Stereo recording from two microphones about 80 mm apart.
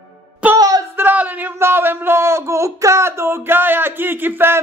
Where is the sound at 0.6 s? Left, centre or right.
Right.